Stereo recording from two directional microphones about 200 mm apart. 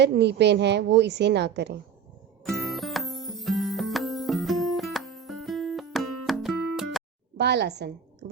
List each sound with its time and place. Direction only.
0.0 s a woman's voice: 60° right (ahead or behind)
2.4 s music: centre (ahead or behind)
7.3 s a woman's voice: 55° right (ahead or behind)